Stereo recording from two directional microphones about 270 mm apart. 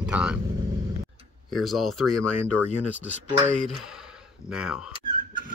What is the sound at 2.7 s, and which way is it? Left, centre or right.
Speech, left.